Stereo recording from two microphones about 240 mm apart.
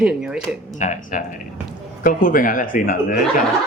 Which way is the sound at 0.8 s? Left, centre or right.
Left.